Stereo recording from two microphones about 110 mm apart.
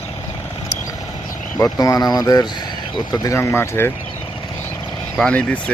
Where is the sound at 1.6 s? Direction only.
30° left (ahead or behind).